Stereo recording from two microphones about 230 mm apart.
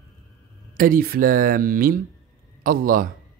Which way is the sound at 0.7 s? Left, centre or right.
Right.